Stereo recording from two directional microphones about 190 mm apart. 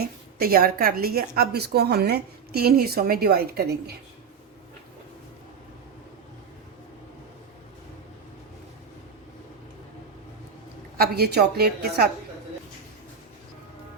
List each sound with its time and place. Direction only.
0.0 s a woman's voice: 50° right (ahead or behind)
10.9 s a woman's voice: 55° right (ahead or behind)